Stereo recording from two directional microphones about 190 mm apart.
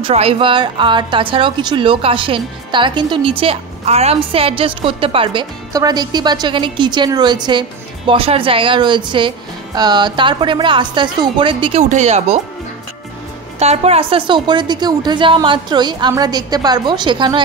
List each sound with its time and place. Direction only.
0.0 s a woman's voice: 30° right (ahead or behind)
13.6 s a woman's voice: 35° right (ahead or behind)